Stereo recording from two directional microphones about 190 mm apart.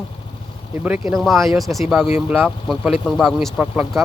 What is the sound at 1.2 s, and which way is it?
Speech, centre (ahead or behind).